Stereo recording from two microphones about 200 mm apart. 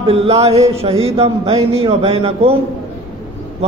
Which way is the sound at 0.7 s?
30° right (ahead or behind).